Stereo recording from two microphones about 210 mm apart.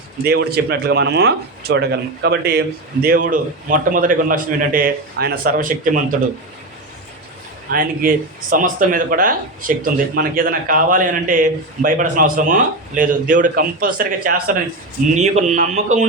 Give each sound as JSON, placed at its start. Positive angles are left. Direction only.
{"t": 0.3, "sound": "speech", "side_deg": -50}
{"t": 7.7, "sound": "a man's voice", "side_deg": -40}